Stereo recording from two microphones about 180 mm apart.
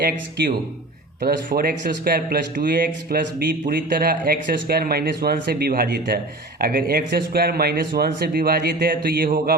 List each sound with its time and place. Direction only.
1.2 s speech: 55° right (ahead or behind)